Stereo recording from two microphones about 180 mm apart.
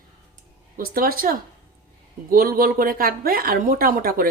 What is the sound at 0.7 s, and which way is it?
Speech, 55° right (ahead or behind).